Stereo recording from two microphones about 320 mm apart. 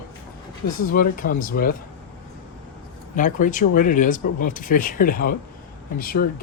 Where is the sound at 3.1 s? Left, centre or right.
Left.